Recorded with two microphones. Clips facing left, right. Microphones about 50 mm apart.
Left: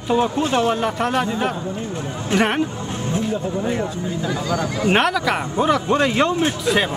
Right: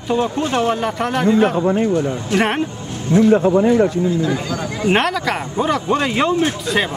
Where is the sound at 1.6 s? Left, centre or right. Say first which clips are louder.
Right 11 dB; right.